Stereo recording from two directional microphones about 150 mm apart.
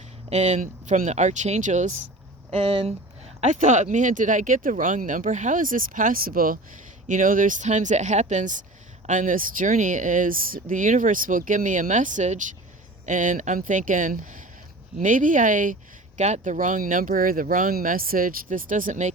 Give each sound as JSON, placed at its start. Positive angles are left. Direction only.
{"t": 0.3, "sound": "speech", "side_deg": -50}
{"t": 2.5, "sound": "speech", "side_deg": -40}
{"t": 3.4, "sound": "speech", "side_deg": -55}
{"t": 7.1, "sound": "speech", "side_deg": -60}